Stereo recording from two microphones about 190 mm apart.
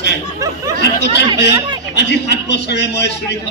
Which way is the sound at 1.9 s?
65° left (ahead or behind).